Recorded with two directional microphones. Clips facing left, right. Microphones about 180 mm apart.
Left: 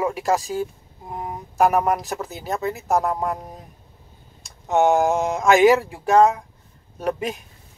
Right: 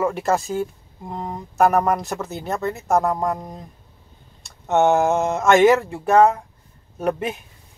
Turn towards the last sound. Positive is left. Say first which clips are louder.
# right 2 dB
turn(degrees=0)  # may be behind; listen again after turning